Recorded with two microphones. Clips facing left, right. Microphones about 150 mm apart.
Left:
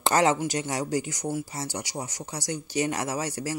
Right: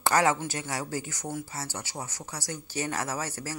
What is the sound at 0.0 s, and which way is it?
Speech, 20° left (ahead or behind).